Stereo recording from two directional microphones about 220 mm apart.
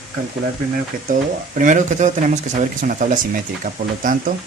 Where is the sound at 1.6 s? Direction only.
35° right (ahead or behind).